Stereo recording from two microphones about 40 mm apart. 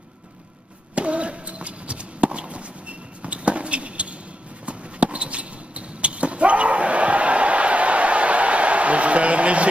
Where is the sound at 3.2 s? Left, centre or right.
Right.